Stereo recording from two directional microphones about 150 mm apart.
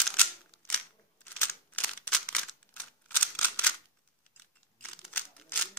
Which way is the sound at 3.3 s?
10° left (ahead or behind).